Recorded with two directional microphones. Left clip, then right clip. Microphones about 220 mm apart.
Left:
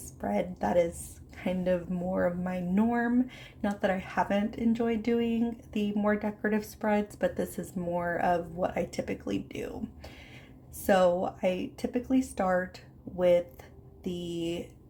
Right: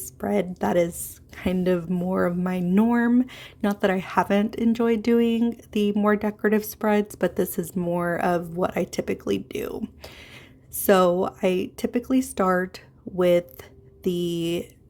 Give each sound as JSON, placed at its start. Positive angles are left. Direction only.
{"t": 0.2, "sound": "speech", "side_deg": -40}